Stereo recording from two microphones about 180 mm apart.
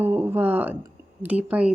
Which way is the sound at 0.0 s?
10° right (ahead or behind).